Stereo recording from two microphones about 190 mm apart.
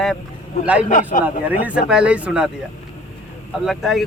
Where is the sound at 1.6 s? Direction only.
5° right (ahead or behind).